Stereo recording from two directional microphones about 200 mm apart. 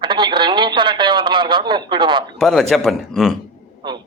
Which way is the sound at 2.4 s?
Centre (ahead or behind).